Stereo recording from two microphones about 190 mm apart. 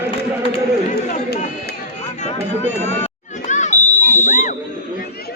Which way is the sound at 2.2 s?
35° left (ahead or behind).